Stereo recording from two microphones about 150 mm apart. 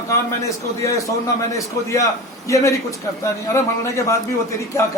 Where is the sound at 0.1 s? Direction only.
20° left (ahead or behind).